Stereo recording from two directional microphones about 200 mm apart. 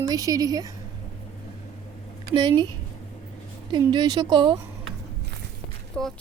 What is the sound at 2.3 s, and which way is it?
A woman's voice, 25° right (ahead or behind).